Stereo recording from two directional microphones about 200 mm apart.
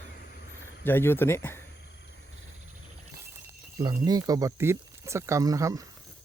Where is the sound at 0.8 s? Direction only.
10° left (ahead or behind).